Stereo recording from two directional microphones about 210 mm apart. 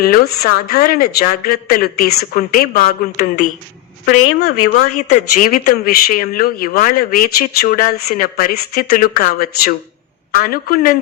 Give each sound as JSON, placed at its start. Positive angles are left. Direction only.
{"t": 0.0, "sound": "speech", "side_deg": 45}
{"t": 4.0, "sound": "a woman's voice", "side_deg": 85}
{"t": 5.4, "sound": "speech", "side_deg": 40}